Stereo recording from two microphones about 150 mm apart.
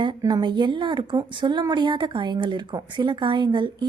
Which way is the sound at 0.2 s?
30° right (ahead or behind).